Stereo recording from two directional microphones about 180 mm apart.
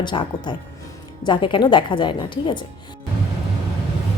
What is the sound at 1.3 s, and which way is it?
Speech, 25° left (ahead or behind).